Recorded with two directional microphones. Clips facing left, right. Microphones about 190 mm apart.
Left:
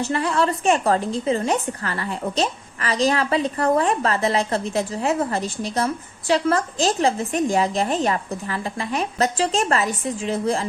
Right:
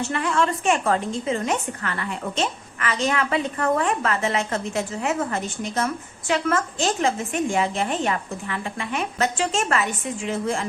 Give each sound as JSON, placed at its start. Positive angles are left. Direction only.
{"t": 0.0, "sound": "a woman's voice", "side_deg": 35}